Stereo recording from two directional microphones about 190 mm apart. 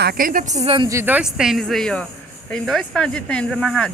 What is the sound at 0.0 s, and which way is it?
Speech, 50° right (ahead or behind).